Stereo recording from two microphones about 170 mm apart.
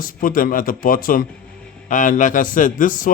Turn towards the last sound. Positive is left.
turn(degrees=50)  # may be behind; listen again after turning